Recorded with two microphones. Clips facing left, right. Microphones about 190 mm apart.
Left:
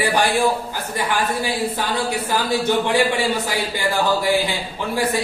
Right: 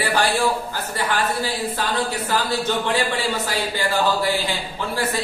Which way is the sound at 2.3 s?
15° left (ahead or behind).